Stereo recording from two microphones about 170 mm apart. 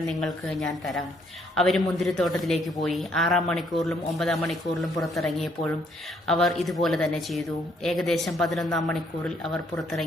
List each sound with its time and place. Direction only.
0.1 s a man's voice: centre (ahead or behind)